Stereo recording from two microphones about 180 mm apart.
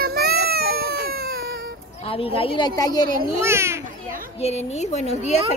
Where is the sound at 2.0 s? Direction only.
30° left (ahead or behind).